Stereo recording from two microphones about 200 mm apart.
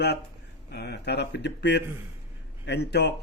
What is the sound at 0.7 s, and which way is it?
Speech, 55° left (ahead or behind).